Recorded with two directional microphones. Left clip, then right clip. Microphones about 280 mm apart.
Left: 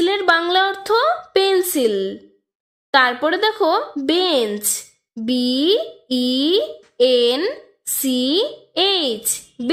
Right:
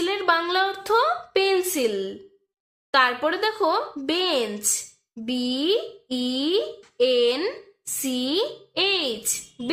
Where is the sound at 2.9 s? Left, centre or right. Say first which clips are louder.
Left 5 dB; left.